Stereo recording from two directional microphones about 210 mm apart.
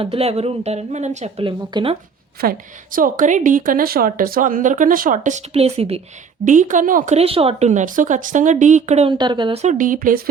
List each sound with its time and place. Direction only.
0.0 s speech: 30° right (ahead or behind)
2.4 s speech: 40° right (ahead or behind)